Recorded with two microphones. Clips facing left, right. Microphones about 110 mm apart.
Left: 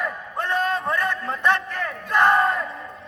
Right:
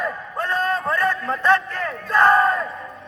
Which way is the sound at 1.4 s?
20° left (ahead or behind).